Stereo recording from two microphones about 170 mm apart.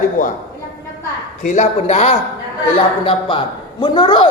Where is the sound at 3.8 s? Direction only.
30° left (ahead or behind).